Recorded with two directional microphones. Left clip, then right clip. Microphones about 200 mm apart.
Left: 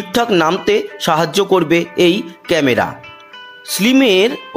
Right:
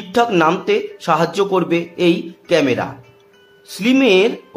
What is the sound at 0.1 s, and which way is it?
A man's voice, 25° left (ahead or behind).